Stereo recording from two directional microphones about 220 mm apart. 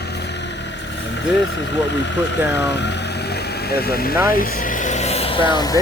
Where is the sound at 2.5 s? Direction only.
50° left (ahead or behind).